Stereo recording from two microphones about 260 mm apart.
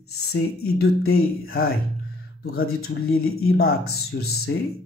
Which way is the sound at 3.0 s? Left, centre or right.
Left.